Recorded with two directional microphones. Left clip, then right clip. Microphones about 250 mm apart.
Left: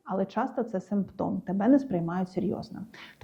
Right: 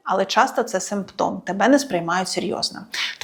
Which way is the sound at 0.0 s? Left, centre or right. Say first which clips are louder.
Right 12 dB; centre.